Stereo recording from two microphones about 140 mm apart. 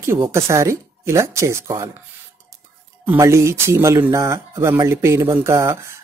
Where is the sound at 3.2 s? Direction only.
20° right (ahead or behind).